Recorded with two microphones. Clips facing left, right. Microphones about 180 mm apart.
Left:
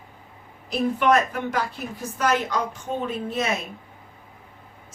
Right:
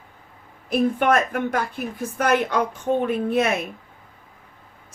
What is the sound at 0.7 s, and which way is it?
A woman's voice, 50° right (ahead or behind).